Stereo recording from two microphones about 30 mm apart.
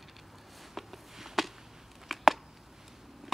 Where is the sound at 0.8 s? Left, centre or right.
Centre.